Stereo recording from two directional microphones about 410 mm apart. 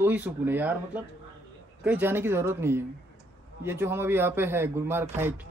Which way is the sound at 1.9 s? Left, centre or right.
Centre.